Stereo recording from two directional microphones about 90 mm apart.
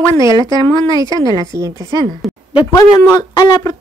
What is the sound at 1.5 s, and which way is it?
Speech, 40° right (ahead or behind).